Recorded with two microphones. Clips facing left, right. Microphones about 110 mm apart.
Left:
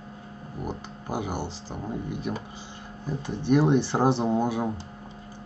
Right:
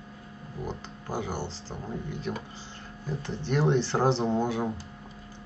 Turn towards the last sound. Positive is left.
turn(degrees=15)  # may be behind; listen again after turning